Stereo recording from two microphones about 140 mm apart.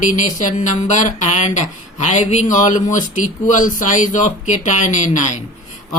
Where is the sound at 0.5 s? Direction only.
60° left (ahead or behind).